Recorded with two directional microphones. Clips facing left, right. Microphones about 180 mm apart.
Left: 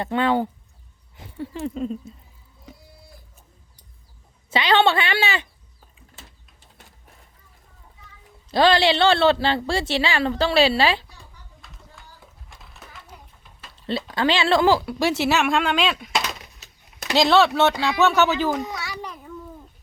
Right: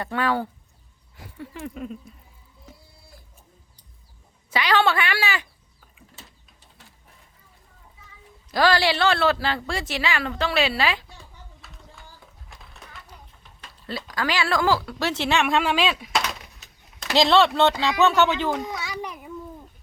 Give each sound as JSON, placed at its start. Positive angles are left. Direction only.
{"t": 0.0, "sound": "speech", "side_deg": 25}
{"t": 1.1, "sound": "a sound", "side_deg": 25}
{"t": 1.5, "sound": "speech", "side_deg": 30}
{"t": 4.5, "sound": "speech", "side_deg": 25}
{"t": 8.4, "sound": "speech", "side_deg": 25}
{"t": 12.5, "sound": "a sound", "side_deg": 0}
{"t": 13.8, "sound": "speech", "side_deg": 25}
{"t": 18.8, "sound": "a child's voice", "side_deg": -15}